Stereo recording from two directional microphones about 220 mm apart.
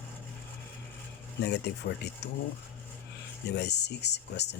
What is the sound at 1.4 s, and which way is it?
Speech, 50° left (ahead or behind).